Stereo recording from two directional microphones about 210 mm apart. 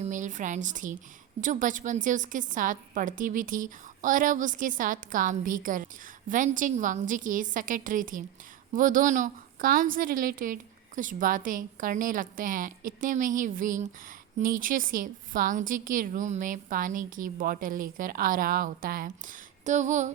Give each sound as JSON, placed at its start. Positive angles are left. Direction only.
{"t": 0.0, "sound": "a woman's voice", "side_deg": -35}